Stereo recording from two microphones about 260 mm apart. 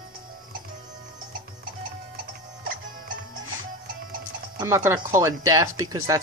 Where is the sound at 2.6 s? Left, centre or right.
Right.